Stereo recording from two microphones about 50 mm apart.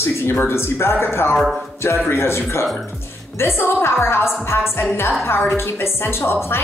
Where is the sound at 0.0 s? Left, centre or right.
Left.